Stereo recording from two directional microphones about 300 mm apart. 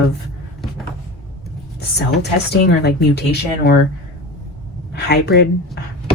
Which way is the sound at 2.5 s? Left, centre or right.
Left.